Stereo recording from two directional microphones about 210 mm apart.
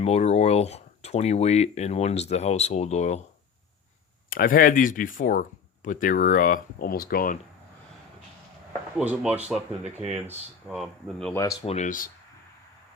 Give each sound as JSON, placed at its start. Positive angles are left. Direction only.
{"t": 0.0, "sound": "speech", "side_deg": 30}
{"t": 4.3, "sound": "speech", "side_deg": 40}
{"t": 9.0, "sound": "speech", "side_deg": -5}
{"t": 11.2, "sound": "speech", "side_deg": 10}
{"t": 11.6, "sound": "speech", "side_deg": 30}